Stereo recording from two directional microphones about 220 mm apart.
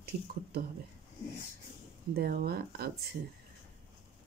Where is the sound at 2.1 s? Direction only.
45° right (ahead or behind).